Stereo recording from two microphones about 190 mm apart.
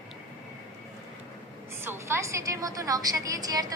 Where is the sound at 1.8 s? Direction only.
15° right (ahead or behind).